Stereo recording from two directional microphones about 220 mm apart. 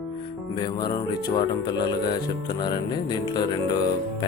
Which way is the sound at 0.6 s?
20° left (ahead or behind).